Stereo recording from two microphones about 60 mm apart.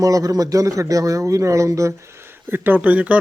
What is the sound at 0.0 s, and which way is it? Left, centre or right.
A man's voice, right.